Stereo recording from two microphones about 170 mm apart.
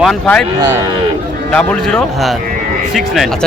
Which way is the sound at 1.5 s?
5° left (ahead or behind).